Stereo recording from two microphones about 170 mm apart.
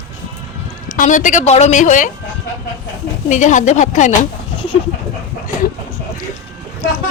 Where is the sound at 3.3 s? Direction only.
45° left (ahead or behind).